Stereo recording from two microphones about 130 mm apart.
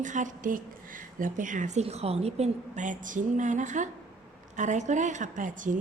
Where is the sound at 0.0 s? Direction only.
75° right (ahead or behind); by 5.8 s 90° right.